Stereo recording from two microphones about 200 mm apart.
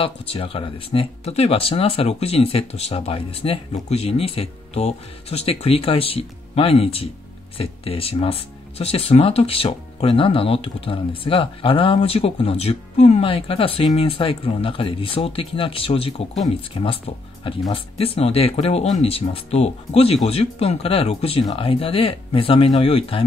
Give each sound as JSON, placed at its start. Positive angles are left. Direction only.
{"t": 0.0, "sound": "speech", "side_deg": 25}